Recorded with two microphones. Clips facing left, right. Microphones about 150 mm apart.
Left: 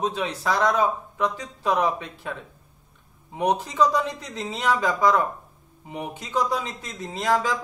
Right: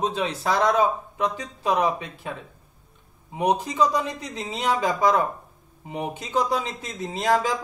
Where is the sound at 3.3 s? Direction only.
10° right (ahead or behind).